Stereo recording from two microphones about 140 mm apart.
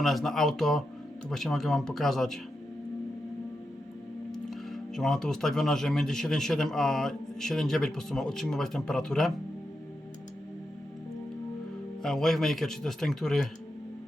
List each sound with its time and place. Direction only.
0.0 s speech: centre (ahead or behind)
4.3 s speech: centre (ahead or behind)
12.0 s speech: centre (ahead or behind)